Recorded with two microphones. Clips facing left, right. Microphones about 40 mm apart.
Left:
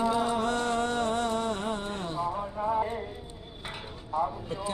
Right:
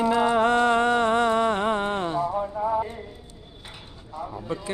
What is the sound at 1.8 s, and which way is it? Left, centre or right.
Music, right.